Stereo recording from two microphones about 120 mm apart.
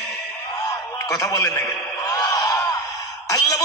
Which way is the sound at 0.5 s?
30° left (ahead or behind).